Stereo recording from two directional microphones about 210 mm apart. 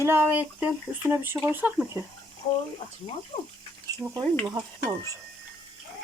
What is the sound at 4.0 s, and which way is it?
Speech, 15° right (ahead or behind).